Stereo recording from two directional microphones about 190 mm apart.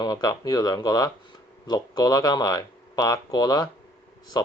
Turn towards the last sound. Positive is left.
turn(degrees=20)  # may be behind; listen again after turning